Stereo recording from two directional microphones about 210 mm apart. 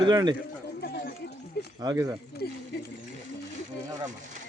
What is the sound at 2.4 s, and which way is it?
Speech, 50° left (ahead or behind).